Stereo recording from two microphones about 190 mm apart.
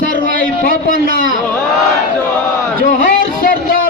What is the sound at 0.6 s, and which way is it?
Speech, 50° left (ahead or behind).